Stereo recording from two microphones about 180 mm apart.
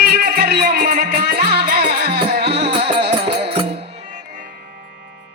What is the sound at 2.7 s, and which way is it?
Music, 30° right (ahead or behind).